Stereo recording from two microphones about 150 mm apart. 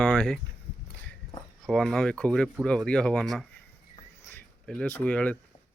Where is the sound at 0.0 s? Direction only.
5° left (ahead or behind).